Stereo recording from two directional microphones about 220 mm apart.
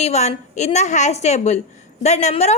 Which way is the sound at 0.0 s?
30° left (ahead or behind).